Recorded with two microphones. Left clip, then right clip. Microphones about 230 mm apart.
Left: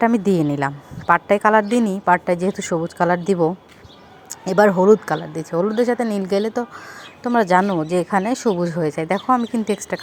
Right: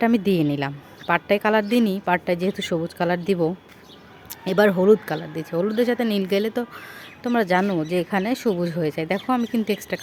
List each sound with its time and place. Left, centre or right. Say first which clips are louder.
0.0 s a woman's voice: left 3 dB; centre
1.6 s a woman's voice: left 2 dB; left
2.0 s a woman's voice: left 5 dB; centre